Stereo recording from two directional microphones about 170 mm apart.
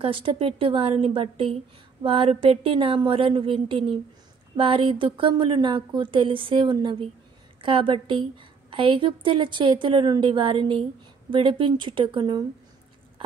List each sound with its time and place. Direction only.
0.0 s a woman's voice: 35° right (ahead or behind)